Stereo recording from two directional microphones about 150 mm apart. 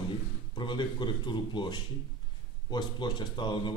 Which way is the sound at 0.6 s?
30° left (ahead or behind).